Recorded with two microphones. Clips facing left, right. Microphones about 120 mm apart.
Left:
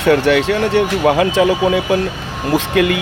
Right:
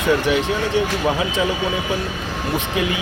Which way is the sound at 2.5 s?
75° left (ahead or behind).